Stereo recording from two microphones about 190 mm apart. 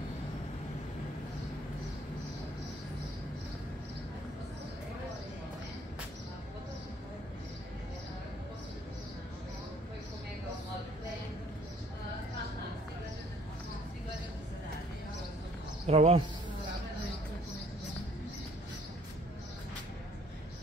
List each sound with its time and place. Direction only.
15.9 s speech: 35° right (ahead or behind)